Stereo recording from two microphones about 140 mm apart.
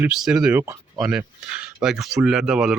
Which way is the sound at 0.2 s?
5° right (ahead or behind).